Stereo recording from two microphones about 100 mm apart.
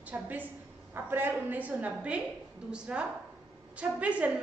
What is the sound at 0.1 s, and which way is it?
A woman's voice, 15° right (ahead or behind).